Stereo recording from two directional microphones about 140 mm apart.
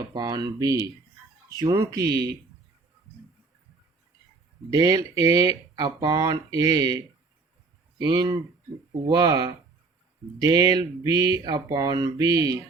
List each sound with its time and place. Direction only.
0.1 s speech: 30° right (ahead or behind)
4.7 s speech: 25° right (ahead or behind)